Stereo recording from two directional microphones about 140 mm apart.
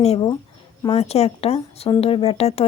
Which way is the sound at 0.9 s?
50° left (ahead or behind).